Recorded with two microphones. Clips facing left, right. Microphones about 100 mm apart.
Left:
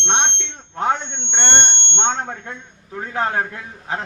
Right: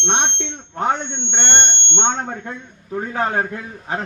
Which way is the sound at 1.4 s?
50° left (ahead or behind).